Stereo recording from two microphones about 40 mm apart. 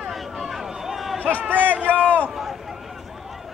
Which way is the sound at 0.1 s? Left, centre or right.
Centre.